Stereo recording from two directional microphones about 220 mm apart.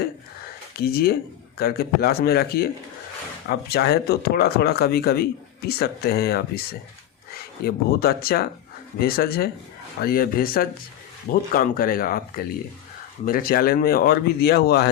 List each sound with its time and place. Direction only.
0.8 s speech: 45° left (ahead or behind)
13.2 s speech: 40° left (ahead or behind)